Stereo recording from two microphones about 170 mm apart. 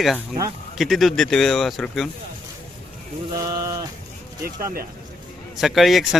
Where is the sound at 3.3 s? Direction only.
20° right (ahead or behind).